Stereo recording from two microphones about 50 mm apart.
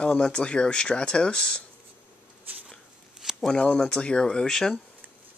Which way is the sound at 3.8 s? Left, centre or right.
Centre.